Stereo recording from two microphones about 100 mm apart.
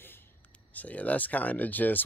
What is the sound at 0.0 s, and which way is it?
Speech, 20° left (ahead or behind).